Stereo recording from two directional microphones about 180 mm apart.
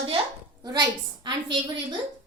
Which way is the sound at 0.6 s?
25° right (ahead or behind).